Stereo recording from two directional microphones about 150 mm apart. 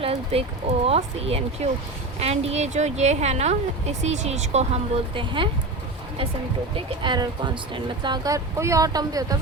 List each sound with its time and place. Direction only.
0.0 s a sound: 40° right (ahead or behind)
0.9 s speech: 40° right (ahead or behind)
6.7 s speech: 30° right (ahead or behind)